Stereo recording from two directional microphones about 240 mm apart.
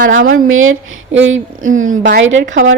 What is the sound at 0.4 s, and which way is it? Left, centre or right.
A woman's voice, right.